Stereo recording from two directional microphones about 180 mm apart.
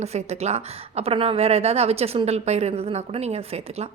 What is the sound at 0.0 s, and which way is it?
A woman's voice, 35° right (ahead or behind).